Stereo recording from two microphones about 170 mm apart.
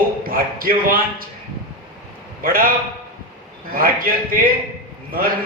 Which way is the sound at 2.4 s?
55° right (ahead or behind).